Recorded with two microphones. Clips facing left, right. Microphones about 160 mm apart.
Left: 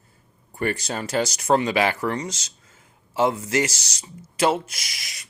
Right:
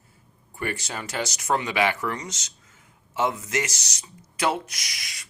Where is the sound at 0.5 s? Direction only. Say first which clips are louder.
Left 5 dB; 40° left (ahead or behind).